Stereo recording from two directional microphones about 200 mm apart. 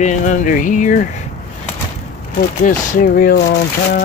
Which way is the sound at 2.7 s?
45° left (ahead or behind).